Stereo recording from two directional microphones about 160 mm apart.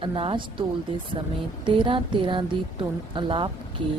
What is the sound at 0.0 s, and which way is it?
Speech, 30° right (ahead or behind).